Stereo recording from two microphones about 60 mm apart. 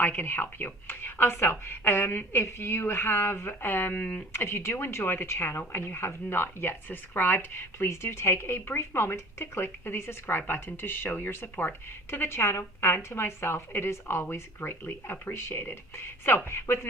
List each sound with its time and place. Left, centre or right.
0.0 s speech: left